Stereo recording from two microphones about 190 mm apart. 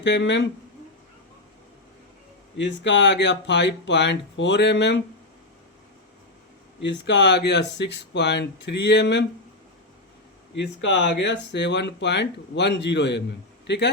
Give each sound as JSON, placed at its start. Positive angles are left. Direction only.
{"t": 0.0, "sound": "speech", "side_deg": 70}
{"t": 2.6, "sound": "speech", "side_deg": 70}
{"t": 6.8, "sound": "speech", "side_deg": 70}
{"t": 10.5, "sound": "a man's voice", "side_deg": 70}